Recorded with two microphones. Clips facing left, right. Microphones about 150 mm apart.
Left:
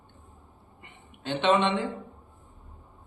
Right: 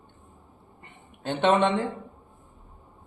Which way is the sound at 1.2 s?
45° right (ahead or behind).